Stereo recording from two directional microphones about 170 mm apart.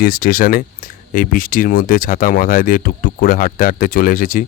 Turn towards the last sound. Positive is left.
turn(degrees=55)  # may be behind; listen again after turning